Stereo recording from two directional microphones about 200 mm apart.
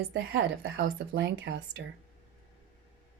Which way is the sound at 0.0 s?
55° right (ahead or behind).